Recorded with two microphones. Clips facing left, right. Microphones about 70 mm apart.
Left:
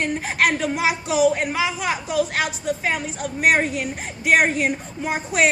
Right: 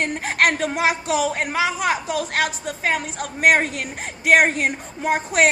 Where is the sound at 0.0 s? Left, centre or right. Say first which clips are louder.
Right 1 dB; right.